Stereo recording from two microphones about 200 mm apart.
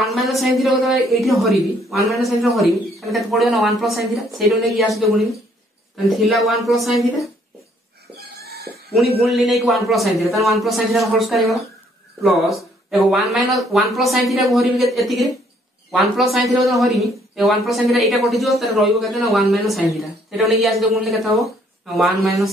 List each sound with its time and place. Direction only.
0.0 s a woman's voice: centre (ahead or behind)
8.2 s a sound: 50° right (ahead or behind)
8.9 s speech: centre (ahead or behind)